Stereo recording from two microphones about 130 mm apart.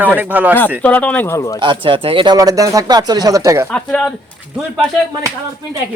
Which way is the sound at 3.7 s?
10° left (ahead or behind).